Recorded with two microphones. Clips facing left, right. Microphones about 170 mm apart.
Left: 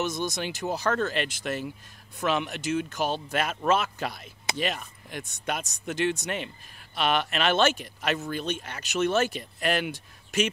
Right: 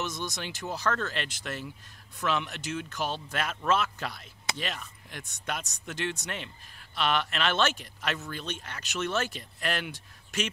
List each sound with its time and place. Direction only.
0.0 s speech: 45° left (ahead or behind)
0.3 s speech: 15° left (ahead or behind)